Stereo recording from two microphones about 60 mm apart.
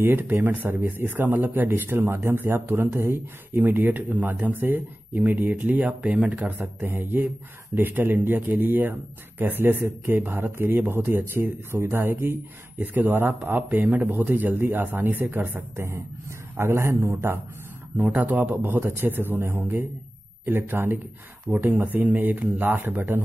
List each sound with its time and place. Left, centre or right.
0.0 s speech: right
6.4 s a man's voice: right
17.9 s speech: right